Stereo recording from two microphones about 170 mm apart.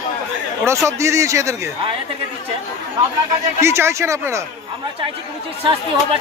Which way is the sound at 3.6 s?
15° right (ahead or behind).